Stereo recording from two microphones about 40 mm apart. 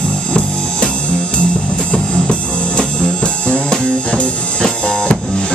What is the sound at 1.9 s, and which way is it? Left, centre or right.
Music, left.